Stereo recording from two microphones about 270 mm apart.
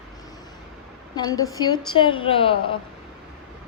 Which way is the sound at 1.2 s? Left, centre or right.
Centre.